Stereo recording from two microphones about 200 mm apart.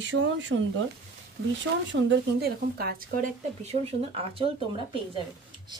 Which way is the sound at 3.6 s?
30° right (ahead or behind).